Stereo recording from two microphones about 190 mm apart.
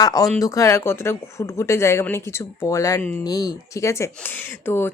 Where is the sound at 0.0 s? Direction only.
20° left (ahead or behind).